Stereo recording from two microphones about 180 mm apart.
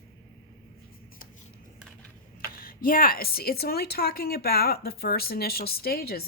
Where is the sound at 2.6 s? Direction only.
55° left (ahead or behind).